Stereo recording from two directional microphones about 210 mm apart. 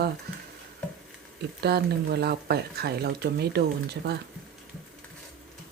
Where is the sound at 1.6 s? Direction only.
50° right (ahead or behind).